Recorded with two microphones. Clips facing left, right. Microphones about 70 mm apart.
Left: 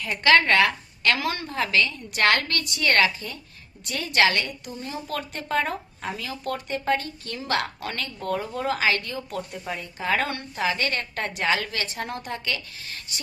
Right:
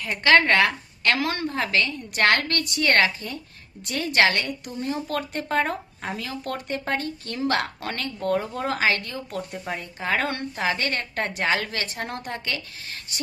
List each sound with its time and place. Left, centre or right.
0.2 s a woman's voice: right